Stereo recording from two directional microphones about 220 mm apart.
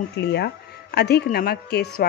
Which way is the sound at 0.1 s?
50° left (ahead or behind).